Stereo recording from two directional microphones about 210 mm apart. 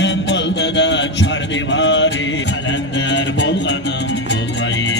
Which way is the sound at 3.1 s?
55° left (ahead or behind).